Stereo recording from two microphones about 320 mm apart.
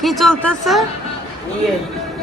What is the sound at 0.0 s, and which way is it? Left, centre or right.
Speech, centre.